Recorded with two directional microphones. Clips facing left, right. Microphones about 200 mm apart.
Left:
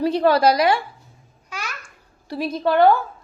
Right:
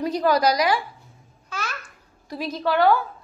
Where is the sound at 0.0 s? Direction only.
30° left (ahead or behind).